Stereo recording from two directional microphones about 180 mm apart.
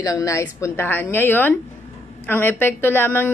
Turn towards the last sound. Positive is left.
turn(degrees=10)  # may be behind; listen again after turning